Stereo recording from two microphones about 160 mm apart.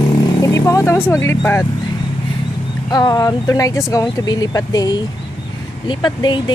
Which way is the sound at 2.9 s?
25° left (ahead or behind).